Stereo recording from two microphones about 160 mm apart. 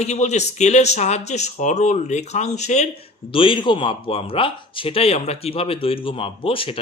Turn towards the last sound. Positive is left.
turn(degrees=35)  # may be behind; listen again after turning